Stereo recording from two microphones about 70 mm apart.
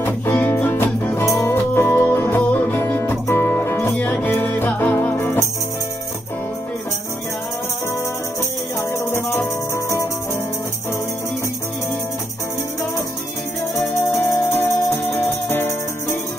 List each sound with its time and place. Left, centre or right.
0.0 s music: left
8.9 s music: left
14.1 s music: left